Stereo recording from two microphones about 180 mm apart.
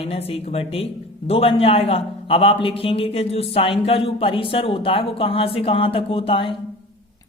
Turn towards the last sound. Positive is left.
turn(degrees=30)  # may be behind; listen again after turning